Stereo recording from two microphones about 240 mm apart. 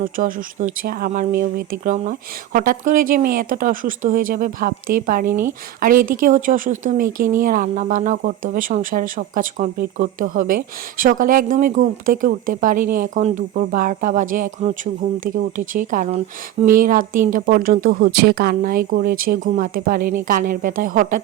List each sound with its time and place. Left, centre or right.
0.0 s a woman's voice: right